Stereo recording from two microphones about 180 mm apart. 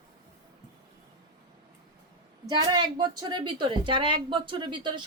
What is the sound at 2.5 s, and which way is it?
A woman's voice, 25° right (ahead or behind).